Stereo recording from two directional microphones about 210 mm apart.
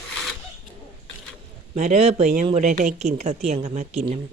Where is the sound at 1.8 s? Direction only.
35° right (ahead or behind).